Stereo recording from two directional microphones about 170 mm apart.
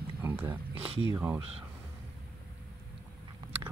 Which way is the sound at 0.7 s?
35° right (ahead or behind).